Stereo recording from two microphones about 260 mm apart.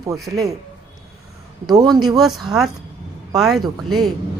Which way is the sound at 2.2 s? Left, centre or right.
Centre.